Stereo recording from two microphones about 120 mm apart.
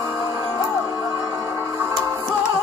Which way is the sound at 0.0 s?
25° right (ahead or behind).